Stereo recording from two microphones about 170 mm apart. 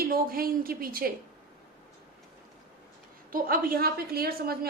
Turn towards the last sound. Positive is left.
turn(degrees=-65)  # may be behind; listen again after turning